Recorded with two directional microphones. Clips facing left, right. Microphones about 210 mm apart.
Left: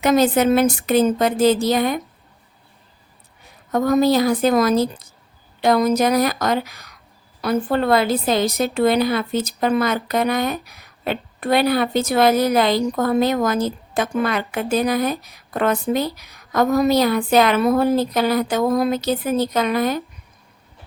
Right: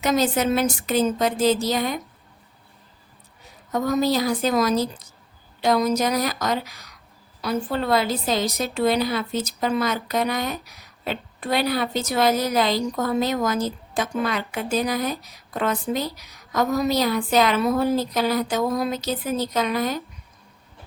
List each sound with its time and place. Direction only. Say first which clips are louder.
0.0 s a woman's voice: left 5 dB; 55° left (ahead or behind)
3.7 s a woman's voice: left 5 dB; 55° left (ahead or behind)